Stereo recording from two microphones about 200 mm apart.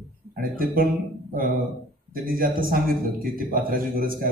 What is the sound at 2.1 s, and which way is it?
A man's voice, 45° right (ahead or behind).